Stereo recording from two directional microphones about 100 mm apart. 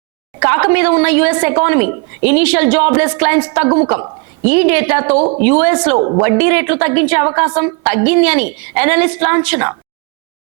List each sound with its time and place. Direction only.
0.3 s a woman's voice: 25° right (ahead or behind)
6.0 s a woman's voice: 35° right (ahead or behind)
6.2 s a woman's voice: 25° right (ahead or behind)